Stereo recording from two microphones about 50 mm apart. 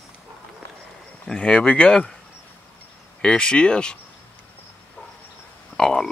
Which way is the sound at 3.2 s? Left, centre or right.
Centre.